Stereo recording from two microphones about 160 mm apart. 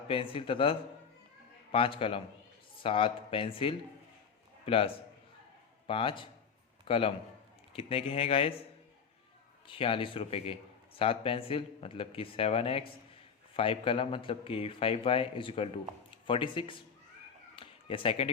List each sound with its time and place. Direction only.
0.1 s a man's voice: 35° left (ahead or behind)
5.9 s a man's voice: 35° left (ahead or behind)
9.6 s speech: 35° left (ahead or behind)
17.5 s a sound: 35° left (ahead or behind)